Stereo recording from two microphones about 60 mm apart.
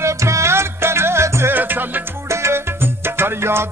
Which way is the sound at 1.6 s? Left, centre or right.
Right.